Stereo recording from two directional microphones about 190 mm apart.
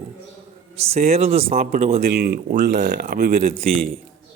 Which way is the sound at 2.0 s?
55° right (ahead or behind).